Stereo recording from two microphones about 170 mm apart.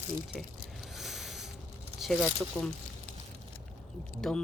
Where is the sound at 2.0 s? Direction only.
Centre (ahead or behind).